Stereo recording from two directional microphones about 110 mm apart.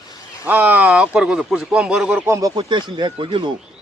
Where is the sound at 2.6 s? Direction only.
45° right (ahead or behind).